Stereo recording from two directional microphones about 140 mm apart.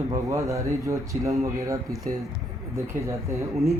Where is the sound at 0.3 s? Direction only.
20° right (ahead or behind).